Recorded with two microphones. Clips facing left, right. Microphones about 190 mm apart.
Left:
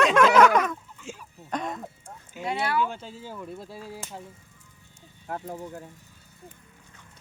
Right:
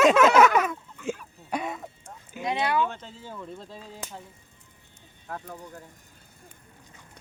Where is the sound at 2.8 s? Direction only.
10° left (ahead or behind).